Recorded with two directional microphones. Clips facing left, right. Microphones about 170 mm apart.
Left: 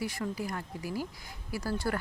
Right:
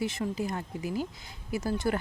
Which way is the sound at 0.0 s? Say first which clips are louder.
Right 3 dB; 25° right (ahead or behind).